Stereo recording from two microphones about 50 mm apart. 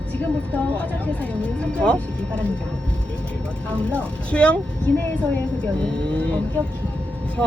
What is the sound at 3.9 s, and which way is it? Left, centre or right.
Speech, left.